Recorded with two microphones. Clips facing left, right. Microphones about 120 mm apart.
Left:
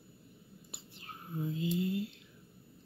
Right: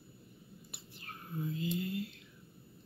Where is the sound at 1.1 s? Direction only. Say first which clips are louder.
Left 1 dB; 20° left (ahead or behind).